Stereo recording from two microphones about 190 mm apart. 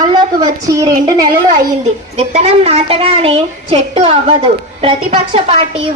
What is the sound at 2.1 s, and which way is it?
A woman's voice, 35° right (ahead or behind).